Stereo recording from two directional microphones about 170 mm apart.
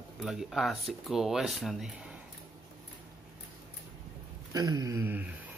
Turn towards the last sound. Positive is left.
turn(degrees=-15)  # may be behind; listen again after turning